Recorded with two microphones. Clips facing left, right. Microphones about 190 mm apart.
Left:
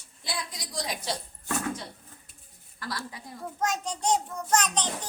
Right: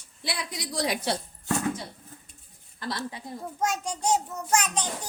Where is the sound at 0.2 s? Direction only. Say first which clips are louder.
Right 3 dB; 65° right (ahead or behind).